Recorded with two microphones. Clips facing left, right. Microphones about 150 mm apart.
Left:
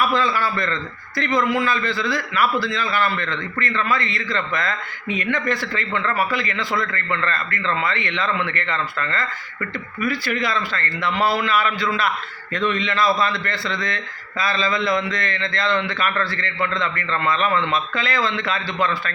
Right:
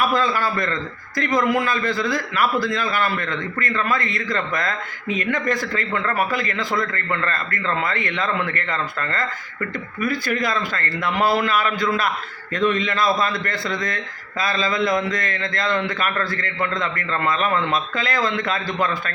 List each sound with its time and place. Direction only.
0.3 s a man's voice: 45° right (ahead or behind)